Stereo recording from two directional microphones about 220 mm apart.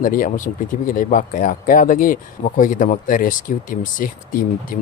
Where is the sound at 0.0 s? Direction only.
40° left (ahead or behind).